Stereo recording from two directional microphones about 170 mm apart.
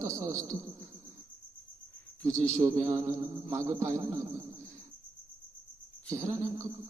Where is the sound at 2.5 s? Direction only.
20° right (ahead or behind).